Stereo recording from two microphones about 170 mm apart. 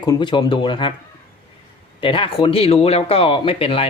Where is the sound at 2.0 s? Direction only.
30° left (ahead or behind).